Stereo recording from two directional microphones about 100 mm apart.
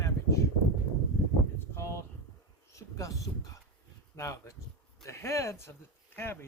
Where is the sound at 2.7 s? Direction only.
35° left (ahead or behind).